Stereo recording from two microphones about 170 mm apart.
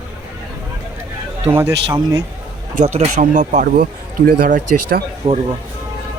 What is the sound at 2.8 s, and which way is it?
Speech, 40° right (ahead or behind).